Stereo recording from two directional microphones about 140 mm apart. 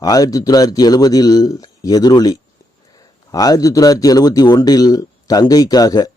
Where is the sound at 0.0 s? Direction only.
25° left (ahead or behind).